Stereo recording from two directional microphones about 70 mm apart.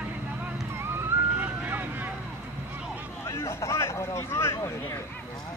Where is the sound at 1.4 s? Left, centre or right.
Right.